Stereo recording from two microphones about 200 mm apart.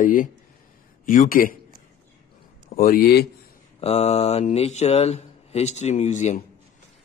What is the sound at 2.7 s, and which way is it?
Speech, 45° left (ahead or behind).